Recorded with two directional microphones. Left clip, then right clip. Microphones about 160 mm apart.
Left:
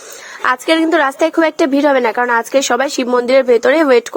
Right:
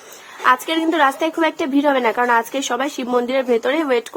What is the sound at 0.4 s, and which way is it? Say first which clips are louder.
Speech: left 3 dB; 35° left (ahead or behind).